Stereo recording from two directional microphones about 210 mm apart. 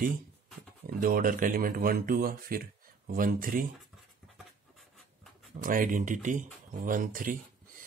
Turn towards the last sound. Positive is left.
turn(degrees=-40)  # may be behind; listen again after turning